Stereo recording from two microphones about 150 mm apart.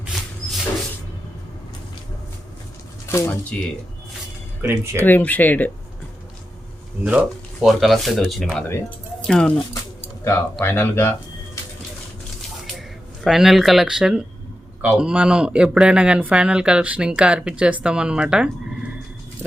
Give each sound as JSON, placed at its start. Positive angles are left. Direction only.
{"t": 3.1, "sound": "speech", "side_deg": 20}
{"t": 4.6, "sound": "speech", "side_deg": -15}
{"t": 5.0, "sound": "speech", "side_deg": 10}
{"t": 7.0, "sound": "speech", "side_deg": -5}
{"t": 13.2, "sound": "speech", "side_deg": 0}